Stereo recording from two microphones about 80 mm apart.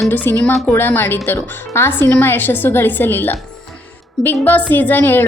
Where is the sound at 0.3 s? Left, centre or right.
Left.